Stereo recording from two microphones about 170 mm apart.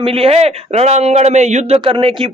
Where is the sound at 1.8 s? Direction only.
30° right (ahead or behind).